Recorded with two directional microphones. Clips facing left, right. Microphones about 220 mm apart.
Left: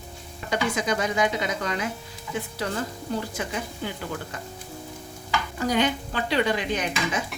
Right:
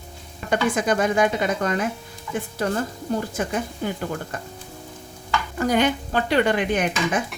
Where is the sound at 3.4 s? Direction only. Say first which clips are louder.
Right 5 dB; 50° right (ahead or behind).